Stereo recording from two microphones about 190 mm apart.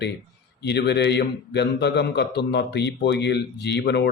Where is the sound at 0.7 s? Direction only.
60° left (ahead or behind).